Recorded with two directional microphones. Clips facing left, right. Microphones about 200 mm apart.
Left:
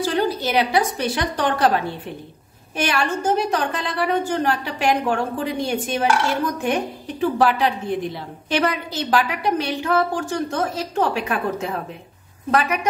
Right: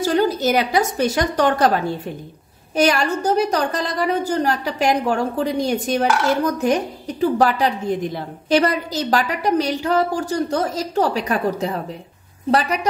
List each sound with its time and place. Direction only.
0.0 s a woman's voice: 45° right (ahead or behind)
2.7 s a woman's voice: 40° right (ahead or behind)